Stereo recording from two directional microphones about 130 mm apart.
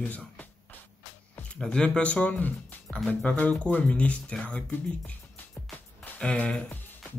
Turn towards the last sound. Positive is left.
turn(degrees=10)  # may be behind; listen again after turning